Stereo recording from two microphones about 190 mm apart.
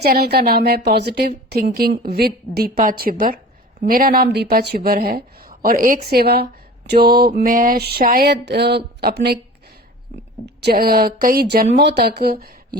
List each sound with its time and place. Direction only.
0.0 s speech: 55° right (ahead or behind)